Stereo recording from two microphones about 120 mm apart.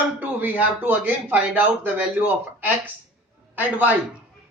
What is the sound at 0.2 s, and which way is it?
A man's voice, 15° right (ahead or behind).